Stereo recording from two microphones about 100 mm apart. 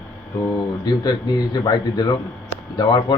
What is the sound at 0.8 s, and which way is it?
A man's voice, 45° left (ahead or behind).